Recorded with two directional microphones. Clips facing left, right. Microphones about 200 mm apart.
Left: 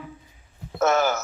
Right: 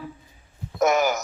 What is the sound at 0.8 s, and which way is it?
Speech, 15° right (ahead or behind).